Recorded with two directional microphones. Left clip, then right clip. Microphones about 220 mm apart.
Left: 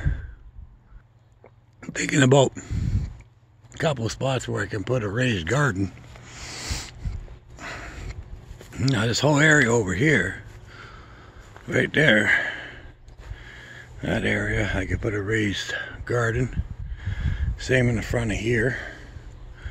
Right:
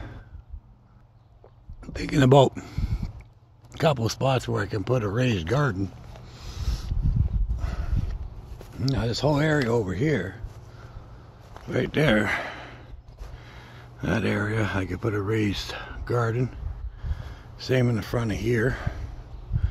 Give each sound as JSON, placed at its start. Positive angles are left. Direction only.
{"t": 1.8, "sound": "speech", "side_deg": 20}
{"t": 6.2, "sound": "a sound", "side_deg": 30}
{"t": 7.5, "sound": "horse", "side_deg": 30}
{"t": 8.7, "sound": "speech", "side_deg": 30}
{"t": 11.6, "sound": "a sound", "side_deg": 20}
{"t": 13.3, "sound": "speech", "side_deg": 5}
{"t": 17.0, "sound": "speech", "side_deg": 25}